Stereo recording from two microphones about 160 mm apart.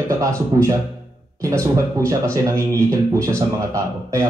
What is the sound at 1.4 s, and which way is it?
A man's voice, 20° right (ahead or behind).